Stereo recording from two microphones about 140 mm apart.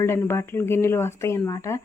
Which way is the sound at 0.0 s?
15° left (ahead or behind).